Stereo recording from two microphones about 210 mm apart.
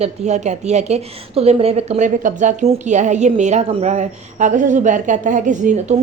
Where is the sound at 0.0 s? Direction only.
35° right (ahead or behind).